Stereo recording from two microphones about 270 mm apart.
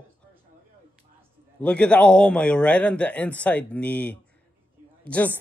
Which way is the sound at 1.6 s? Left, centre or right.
Centre.